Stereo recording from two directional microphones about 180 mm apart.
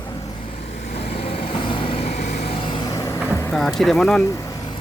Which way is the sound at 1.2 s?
35° left (ahead or behind).